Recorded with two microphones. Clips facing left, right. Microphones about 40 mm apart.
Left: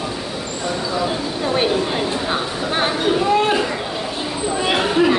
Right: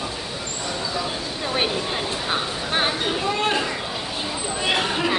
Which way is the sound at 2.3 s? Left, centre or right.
Centre.